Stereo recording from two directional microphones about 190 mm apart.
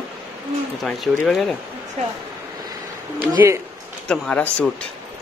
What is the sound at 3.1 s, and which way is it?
Speech, 10° right (ahead or behind).